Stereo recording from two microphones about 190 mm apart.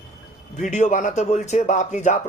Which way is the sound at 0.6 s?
40° left (ahead or behind).